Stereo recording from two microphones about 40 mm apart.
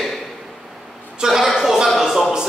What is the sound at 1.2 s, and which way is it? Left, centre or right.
Speech, centre.